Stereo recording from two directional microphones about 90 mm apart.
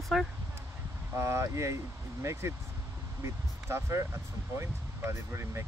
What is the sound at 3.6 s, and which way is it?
Speech, 30° right (ahead or behind).